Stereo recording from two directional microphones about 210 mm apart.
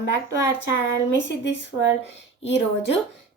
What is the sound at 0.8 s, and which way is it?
A woman's voice, 60° left (ahead or behind).